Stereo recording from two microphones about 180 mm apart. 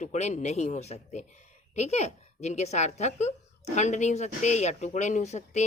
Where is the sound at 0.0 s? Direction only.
40° left (ahead or behind).